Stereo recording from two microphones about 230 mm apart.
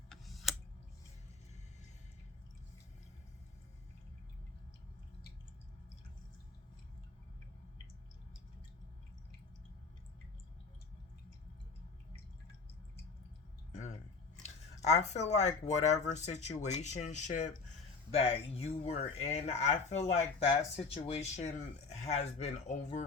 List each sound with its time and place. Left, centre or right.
0.1 s tick-tock: centre
13.7 s a sound: left
14.4 s speech: left